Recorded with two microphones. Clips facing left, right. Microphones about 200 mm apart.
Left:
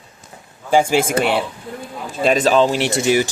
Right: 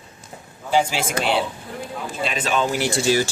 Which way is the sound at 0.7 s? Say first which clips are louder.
Left 5 dB; 50° left (ahead or behind).